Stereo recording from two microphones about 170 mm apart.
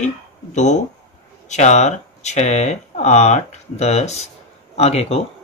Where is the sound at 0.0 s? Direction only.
45° left (ahead or behind).